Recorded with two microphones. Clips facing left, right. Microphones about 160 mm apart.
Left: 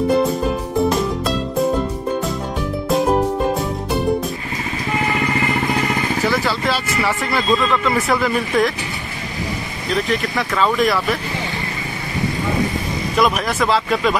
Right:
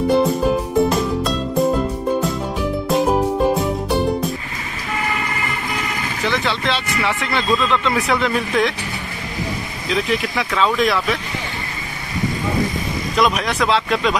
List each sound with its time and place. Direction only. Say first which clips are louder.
0.1 s music: right 1 dB; centre (ahead or behind)
2.9 s music: left 1 dB; centre (ahead or behind)
6.2 s speech: right 1 dB; 5° left (ahead or behind)
9.8 s speech: even; centre (ahead or behind)
13.1 s speech: left 1 dB; centre (ahead or behind)